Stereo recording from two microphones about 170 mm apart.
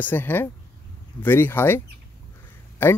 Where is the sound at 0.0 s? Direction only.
10° left (ahead or behind).